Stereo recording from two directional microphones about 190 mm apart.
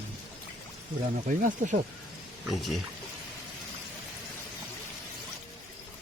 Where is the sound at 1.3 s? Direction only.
45° right (ahead or behind).